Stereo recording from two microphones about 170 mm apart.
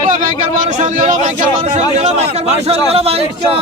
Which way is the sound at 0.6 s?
45° right (ahead or behind).